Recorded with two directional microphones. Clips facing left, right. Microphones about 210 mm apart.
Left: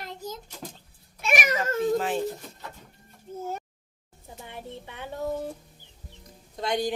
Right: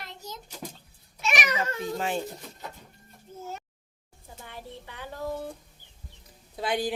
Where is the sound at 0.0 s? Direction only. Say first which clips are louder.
Left 5 dB; 50° left (ahead or behind).